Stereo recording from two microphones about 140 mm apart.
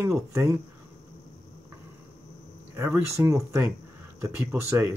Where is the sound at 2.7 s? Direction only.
15° right (ahead or behind).